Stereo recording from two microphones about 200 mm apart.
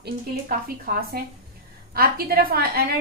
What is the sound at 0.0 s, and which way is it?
A woman's voice, 50° right (ahead or behind).